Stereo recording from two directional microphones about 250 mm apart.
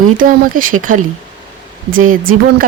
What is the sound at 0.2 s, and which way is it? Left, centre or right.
Speech, right.